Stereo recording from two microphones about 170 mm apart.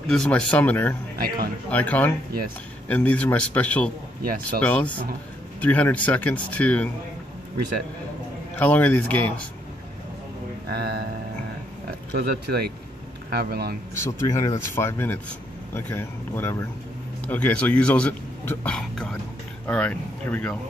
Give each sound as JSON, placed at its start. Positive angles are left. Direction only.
{"t": 0.1, "sound": "a man's voice", "side_deg": 5}
{"t": 1.2, "sound": "speech", "side_deg": -60}
{"t": 1.7, "sound": "a man's voice", "side_deg": 10}
{"t": 8.5, "sound": "a man's voice", "side_deg": 10}
{"t": 12.1, "sound": "speech", "side_deg": -65}
{"t": 13.9, "sound": "a man's voice", "side_deg": 15}